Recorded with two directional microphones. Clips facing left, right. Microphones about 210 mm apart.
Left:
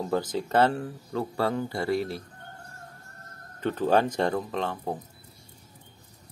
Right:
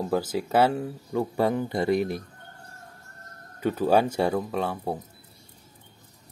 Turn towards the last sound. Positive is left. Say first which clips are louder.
# right 2 dB
turn(degrees=-10)  # may be behind; listen again after turning